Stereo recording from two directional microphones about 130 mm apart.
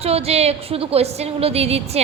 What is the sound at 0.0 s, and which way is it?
A woman's voice, 50° right (ahead or behind).